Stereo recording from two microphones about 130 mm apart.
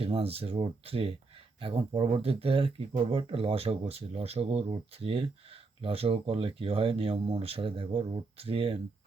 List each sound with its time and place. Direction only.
0.0 s speech: 50° right (ahead or behind)